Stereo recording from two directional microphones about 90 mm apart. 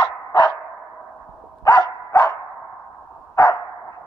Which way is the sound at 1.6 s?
45° left (ahead or behind).